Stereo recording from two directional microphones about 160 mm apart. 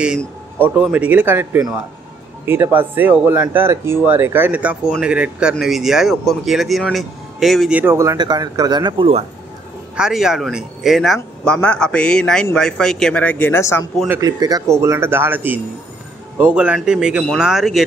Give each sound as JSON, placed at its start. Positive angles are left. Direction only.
{"t": 0.6, "sound": "speech", "side_deg": -10}
{"t": 7.8, "sound": "speech", "side_deg": -15}
{"t": 9.9, "sound": "speech", "side_deg": -5}
{"t": 14.0, "sound": "speech", "side_deg": -15}